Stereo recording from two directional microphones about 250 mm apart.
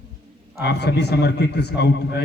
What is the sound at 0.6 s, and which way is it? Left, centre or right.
A man's voice, left.